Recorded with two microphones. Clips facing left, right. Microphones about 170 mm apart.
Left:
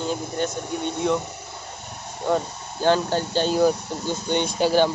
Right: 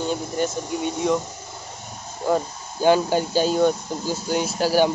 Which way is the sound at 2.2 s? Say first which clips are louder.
Right 1 dB; 10° right (ahead or behind).